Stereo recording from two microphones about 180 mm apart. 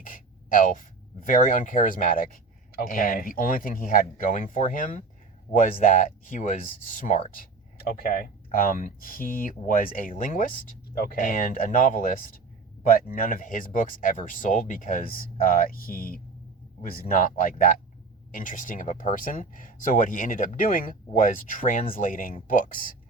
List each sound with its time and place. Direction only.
0.0 s gasp: 50° left (ahead or behind)
1.3 s speech: 50° left (ahead or behind)